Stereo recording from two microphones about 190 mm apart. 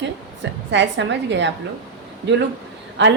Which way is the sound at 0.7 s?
70° right (ahead or behind).